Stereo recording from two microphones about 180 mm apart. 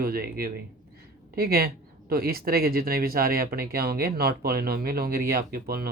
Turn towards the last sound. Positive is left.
turn(degrees=-55)  # may be behind; listen again after turning